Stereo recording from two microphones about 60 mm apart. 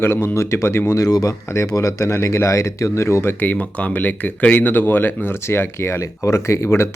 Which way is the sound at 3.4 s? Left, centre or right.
Left.